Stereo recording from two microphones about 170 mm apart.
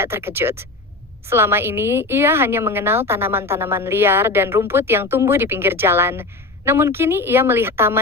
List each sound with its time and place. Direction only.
0.0 s a woman's voice: 15° right (ahead or behind)